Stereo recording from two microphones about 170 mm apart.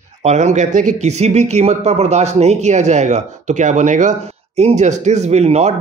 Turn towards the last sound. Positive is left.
turn(degrees=-40)  # may be behind; listen again after turning